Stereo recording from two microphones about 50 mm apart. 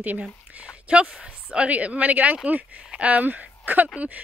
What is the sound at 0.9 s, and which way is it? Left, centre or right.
Speech, right.